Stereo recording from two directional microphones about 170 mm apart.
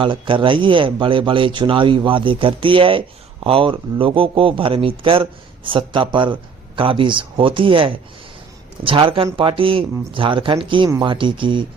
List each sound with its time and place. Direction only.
0.0 s a man's voice: 30° right (ahead or behind)